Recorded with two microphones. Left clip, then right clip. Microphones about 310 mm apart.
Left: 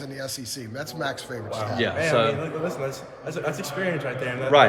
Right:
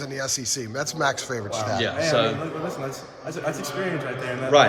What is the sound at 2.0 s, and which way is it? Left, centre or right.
Speech, centre.